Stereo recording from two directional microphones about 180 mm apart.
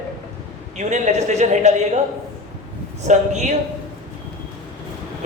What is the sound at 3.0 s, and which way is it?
Speech, 40° right (ahead or behind).